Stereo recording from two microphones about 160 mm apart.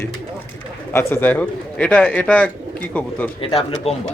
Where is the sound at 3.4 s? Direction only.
35° left (ahead or behind).